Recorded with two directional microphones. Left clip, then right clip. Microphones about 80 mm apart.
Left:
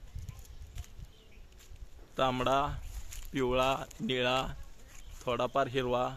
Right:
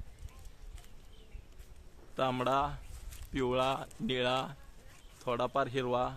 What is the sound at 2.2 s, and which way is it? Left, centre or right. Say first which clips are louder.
Speech: left 2 dB; left.